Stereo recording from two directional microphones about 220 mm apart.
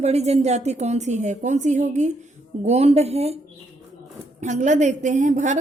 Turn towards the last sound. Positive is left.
turn(degrees=-35)  # may be behind; listen again after turning